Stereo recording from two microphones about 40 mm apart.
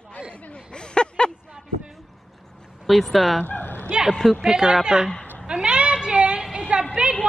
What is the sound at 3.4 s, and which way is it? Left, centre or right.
Bow-wow, left.